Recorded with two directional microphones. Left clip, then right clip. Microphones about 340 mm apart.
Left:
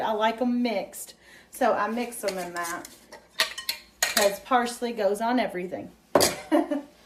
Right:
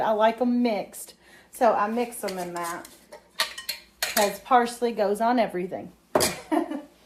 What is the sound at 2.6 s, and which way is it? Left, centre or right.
Cutlery, centre.